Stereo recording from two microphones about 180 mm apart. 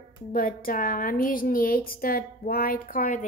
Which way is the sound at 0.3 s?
50° left (ahead or behind).